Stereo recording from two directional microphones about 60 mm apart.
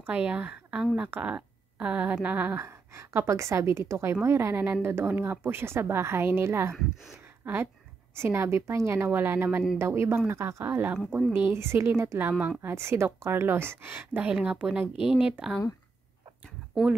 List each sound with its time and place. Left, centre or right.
0.0 s a woman's voice: right
2.5 s a woman's voice: right
4.8 s a woman's voice: right
10.6 s a woman's voice: right
12.3 s speech: right
12.6 s a woman's voice: right
14.3 s speech: centre